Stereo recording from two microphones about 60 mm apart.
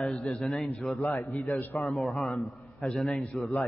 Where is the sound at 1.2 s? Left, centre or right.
Left.